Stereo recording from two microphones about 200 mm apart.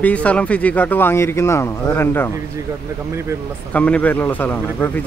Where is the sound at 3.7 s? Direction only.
5° left (ahead or behind).